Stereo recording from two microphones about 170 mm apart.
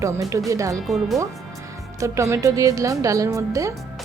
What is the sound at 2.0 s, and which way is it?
A woman's voice, 15° right (ahead or behind).